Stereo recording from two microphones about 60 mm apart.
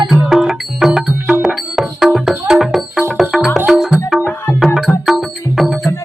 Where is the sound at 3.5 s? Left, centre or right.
Right.